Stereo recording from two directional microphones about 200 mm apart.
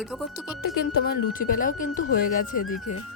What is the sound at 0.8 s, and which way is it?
Speech, 50° left (ahead or behind).